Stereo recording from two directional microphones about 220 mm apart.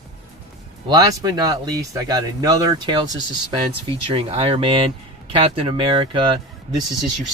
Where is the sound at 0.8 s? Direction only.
15° right (ahead or behind).